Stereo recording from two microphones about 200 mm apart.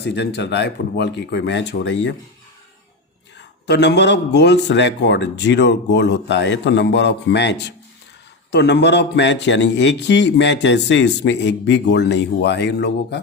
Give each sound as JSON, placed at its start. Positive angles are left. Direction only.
{"t": 0.0, "sound": "speech", "side_deg": 55}
{"t": 3.3, "sound": "speech", "side_deg": 60}
{"t": 8.5, "sound": "speech", "side_deg": 60}